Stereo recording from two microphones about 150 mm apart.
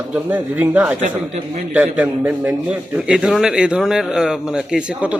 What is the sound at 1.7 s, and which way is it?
A man's voice, 10° right (ahead or behind).